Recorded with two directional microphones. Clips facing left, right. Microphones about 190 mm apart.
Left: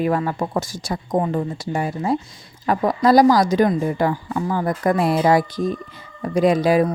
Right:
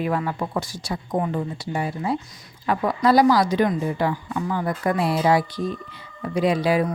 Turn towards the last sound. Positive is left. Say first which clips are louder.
# left 4 dB
turn(degrees=45)  # may be behind; listen again after turning